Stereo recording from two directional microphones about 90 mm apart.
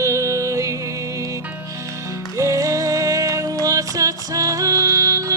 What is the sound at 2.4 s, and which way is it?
Music, 40° right (ahead or behind).